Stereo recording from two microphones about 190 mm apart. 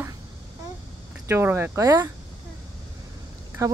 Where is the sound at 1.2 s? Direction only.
15° right (ahead or behind).